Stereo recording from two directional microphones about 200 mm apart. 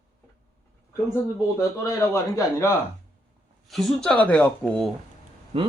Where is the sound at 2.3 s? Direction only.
15° left (ahead or behind).